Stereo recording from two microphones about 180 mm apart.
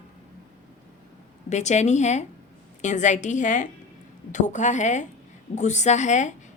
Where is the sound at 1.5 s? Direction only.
40° left (ahead or behind).